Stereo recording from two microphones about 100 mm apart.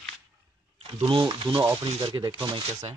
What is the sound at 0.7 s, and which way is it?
Speech, 75° right (ahead or behind).